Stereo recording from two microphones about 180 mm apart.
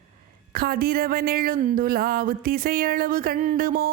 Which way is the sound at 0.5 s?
55° right (ahead or behind).